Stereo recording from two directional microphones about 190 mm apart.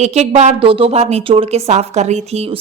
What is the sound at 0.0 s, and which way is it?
Speech, 35° right (ahead or behind).